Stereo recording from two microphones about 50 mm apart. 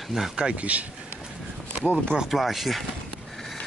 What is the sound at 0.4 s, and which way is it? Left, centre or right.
Speech, right.